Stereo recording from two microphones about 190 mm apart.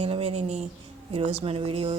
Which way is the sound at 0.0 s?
30° right (ahead or behind).